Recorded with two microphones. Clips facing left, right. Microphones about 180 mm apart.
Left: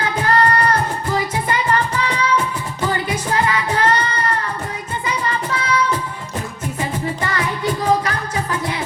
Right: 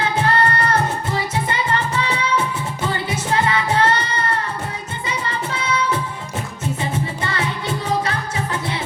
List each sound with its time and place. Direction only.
0.0 s music: 25° right (ahead or behind)
5.5 s music: 25° right (ahead or behind)